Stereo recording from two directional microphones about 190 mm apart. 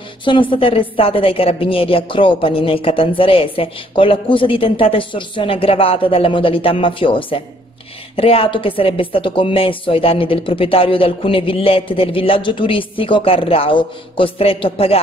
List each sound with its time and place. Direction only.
0.2 s a woman's voice: 25° left (ahead or behind)